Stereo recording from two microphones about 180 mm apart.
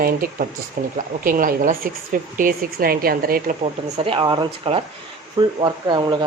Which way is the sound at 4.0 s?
30° right (ahead or behind).